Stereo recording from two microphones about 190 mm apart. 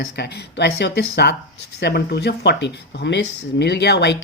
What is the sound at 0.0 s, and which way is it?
Speech, 60° left (ahead or behind).